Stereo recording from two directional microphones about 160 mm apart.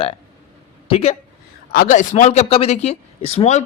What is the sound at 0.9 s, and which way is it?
Speech, 40° left (ahead or behind).